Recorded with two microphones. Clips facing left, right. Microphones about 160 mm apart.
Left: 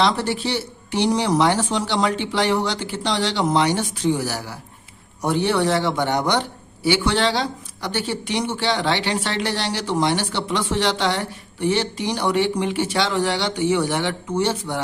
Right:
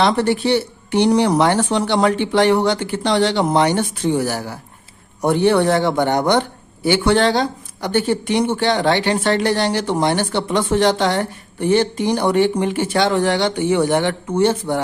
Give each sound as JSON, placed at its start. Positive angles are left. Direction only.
{"t": 0.0, "sound": "speech", "side_deg": -60}